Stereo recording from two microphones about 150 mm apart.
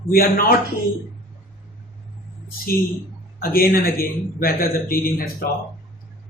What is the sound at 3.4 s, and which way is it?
A man's voice, 80° left.